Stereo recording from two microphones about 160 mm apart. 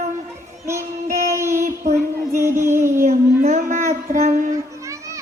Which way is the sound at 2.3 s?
15° right (ahead or behind).